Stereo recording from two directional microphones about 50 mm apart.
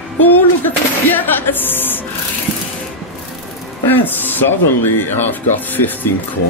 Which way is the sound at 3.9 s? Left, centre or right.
Left.